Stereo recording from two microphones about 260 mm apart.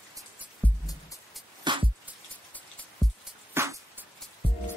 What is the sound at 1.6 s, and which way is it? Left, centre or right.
Music, centre.